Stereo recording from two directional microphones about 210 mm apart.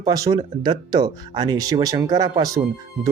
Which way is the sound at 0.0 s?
15° right (ahead or behind).